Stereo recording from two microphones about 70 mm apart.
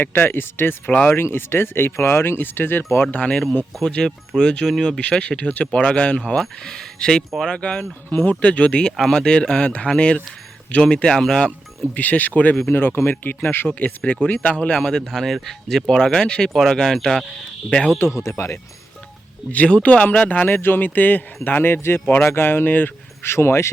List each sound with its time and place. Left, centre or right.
0.0 s speech: left; by 11.5 s centre
11.9 s speech: left
14.8 s speech: centre
18.2 s speech: left
19.5 s speech: centre; by 23.6 s left